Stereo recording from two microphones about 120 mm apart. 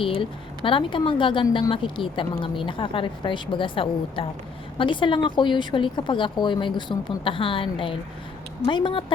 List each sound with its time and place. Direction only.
0.0 s speech: 45° left (ahead or behind)